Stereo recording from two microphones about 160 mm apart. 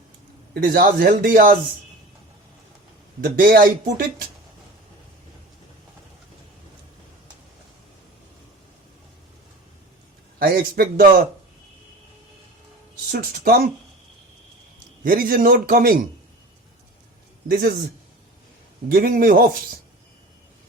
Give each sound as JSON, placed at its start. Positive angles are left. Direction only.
{"t": 0.5, "sound": "speech", "side_deg": -70}
{"t": 3.2, "sound": "speech", "side_deg": -65}
{"t": 10.4, "sound": "speech", "side_deg": -65}
{"t": 13.1, "sound": "speech", "side_deg": -65}
{"t": 15.0, "sound": "speech", "side_deg": -65}
{"t": 17.5, "sound": "speech", "side_deg": -65}
{"t": 18.9, "sound": "speech", "side_deg": -65}